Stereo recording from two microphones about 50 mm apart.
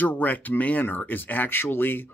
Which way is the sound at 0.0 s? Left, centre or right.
Left.